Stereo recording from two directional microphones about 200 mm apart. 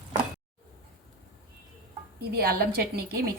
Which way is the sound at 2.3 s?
50° right (ahead or behind).